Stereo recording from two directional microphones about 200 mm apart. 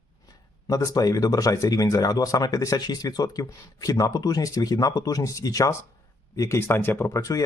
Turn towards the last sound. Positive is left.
turn(degrees=15)  # may be behind; listen again after turning